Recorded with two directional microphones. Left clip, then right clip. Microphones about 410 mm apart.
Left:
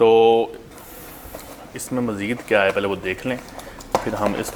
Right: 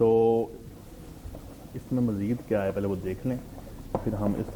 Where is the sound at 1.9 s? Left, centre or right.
Centre.